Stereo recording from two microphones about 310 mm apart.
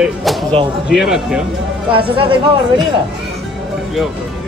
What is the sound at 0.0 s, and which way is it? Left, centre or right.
A man's voice, centre.